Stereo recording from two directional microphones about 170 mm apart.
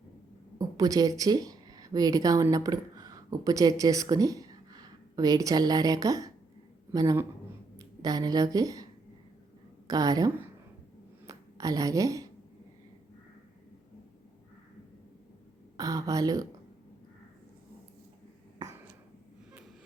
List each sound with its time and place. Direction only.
0.6 s a woman's voice: 20° right (ahead or behind)
15.8 s speech: 20° right (ahead or behind)